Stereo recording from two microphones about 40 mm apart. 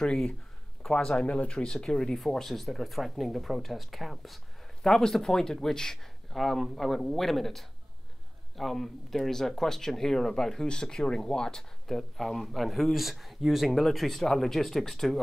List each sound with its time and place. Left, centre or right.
0.0 s speech: centre
1.1 s speech: left
1.7 s speech: centre
2.1 s speech: centre
11.9 s speech: centre
13.8 s speech: centre